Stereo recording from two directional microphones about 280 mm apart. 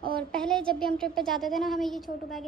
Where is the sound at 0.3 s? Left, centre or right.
Centre.